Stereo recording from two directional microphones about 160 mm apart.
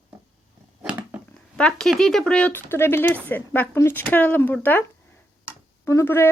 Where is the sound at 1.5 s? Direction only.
5° left (ahead or behind).